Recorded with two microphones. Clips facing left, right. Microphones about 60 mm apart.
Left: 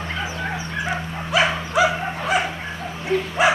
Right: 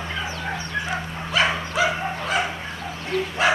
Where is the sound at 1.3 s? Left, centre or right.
Centre.